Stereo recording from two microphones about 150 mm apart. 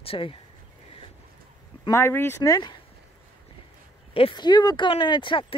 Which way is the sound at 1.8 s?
15° left (ahead or behind).